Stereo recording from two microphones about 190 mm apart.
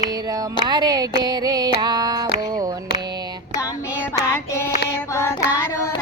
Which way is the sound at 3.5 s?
15° left (ahead or behind).